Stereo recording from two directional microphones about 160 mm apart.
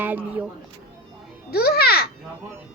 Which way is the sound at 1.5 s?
75° left (ahead or behind).